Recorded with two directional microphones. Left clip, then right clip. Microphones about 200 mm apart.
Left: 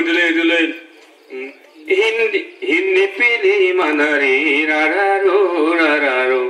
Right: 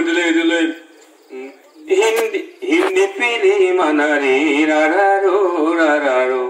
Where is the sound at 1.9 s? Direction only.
45° right (ahead or behind).